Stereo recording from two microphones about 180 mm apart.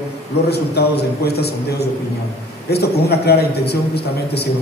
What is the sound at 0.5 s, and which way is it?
A man's voice, 65° left (ahead or behind).